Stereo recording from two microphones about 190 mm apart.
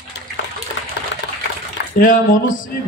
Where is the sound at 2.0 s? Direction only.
45° left (ahead or behind).